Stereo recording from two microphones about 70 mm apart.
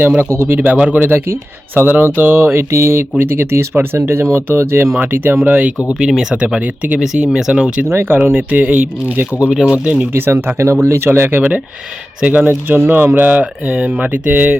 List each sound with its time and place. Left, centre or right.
0.3 s mantra: right
1.0 s speech: right
5.5 s mantra: right
6.0 s speech: centre
7.9 s speech: right
8.2 s mantra: centre
9.5 s speech: centre
10.2 s speech: right
12.2 s mantra: centre
12.5 s mantra: right